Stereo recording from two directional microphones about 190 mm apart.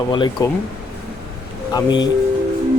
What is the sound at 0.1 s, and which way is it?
Speech, 25° left (ahead or behind).